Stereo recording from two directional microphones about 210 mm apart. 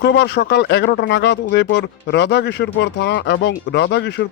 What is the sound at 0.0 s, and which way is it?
Speech, 55° left (ahead or behind).